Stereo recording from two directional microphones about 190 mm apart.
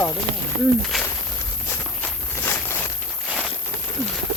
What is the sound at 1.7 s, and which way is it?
Walk, 10° left (ahead or behind).